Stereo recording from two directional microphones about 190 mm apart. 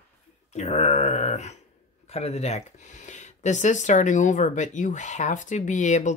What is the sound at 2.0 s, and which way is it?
Speech, 35° left (ahead or behind).